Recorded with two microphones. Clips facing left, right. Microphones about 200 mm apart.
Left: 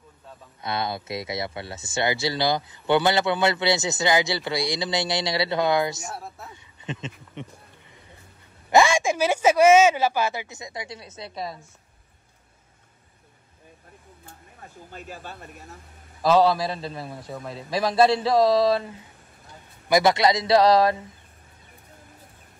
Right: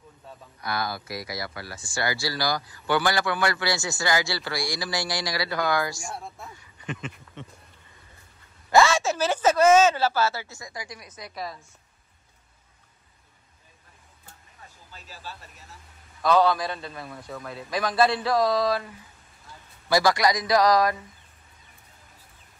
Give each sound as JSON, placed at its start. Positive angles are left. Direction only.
{"t": 0.6, "sound": "speech", "side_deg": 25}
{"t": 6.0, "sound": "speech", "side_deg": 5}
{"t": 6.5, "sound": "a sound", "side_deg": 25}
{"t": 8.6, "sound": "speech", "side_deg": 15}
{"t": 14.6, "sound": "speech", "side_deg": 55}
{"t": 16.2, "sound": "speech", "side_deg": 30}